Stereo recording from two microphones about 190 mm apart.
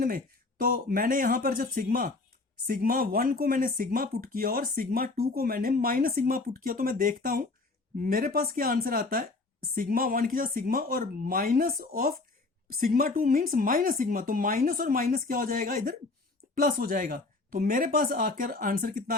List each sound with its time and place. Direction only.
0.6 s speech: 50° right (ahead or behind)